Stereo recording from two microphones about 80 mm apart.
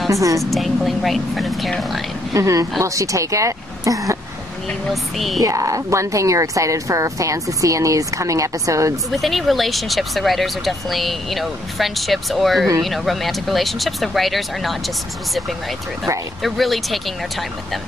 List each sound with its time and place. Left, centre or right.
0.1 s a woman's voice: right
0.4 s speech: centre
2.3 s a woman's voice: right
5.1 s speech: centre
5.4 s a woman's voice: right
9.1 s speech: centre
16.4 s speech: centre